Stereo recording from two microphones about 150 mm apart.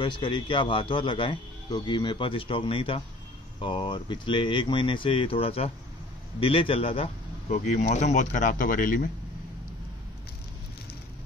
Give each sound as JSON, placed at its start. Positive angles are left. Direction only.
{"t": 0.0, "sound": "a man's voice", "side_deg": 30}
{"t": 7.5, "sound": "speech", "side_deg": 50}